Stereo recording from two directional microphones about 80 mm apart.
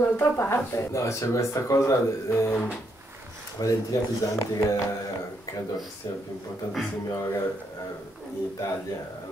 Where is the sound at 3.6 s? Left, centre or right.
Left.